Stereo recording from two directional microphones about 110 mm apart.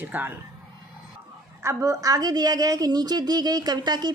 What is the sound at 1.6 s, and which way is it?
Speech, 30° right (ahead or behind).